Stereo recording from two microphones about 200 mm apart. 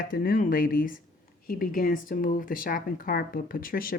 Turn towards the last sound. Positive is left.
turn(degrees=45)  # may be behind; listen again after turning